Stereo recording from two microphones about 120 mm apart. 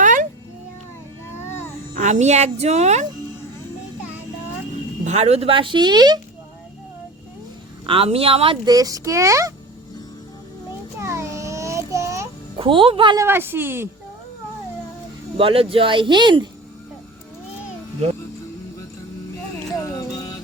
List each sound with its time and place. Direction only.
0.0 s cat: 90° right
1.5 s a sound: 20° left (ahead or behind)
2.0 s a woman's voice: 80° right
5.0 s speech: 65° right (ahead or behind); by 6.1 s 35° right (ahead or behind)
7.9 s speech: 50° right (ahead or behind)
8.6 s a child's voice: 30° right (ahead or behind)
11.0 s child singing: 25° right (ahead or behind)
12.5 s speech: 45° right (ahead or behind)
13.1 s a child's voice: 20° right (ahead or behind)
15.4 s speech: 50° right (ahead or behind)
19.8 s music: 30° left (ahead or behind)